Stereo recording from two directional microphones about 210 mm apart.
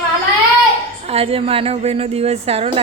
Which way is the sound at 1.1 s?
30° right (ahead or behind).